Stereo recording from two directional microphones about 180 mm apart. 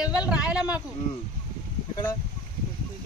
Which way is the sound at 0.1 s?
5° right (ahead or behind).